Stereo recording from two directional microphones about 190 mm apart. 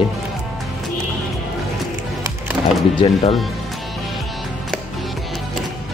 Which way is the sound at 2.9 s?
25° left (ahead or behind).